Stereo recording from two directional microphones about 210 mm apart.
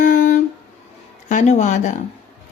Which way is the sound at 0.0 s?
40° left (ahead or behind).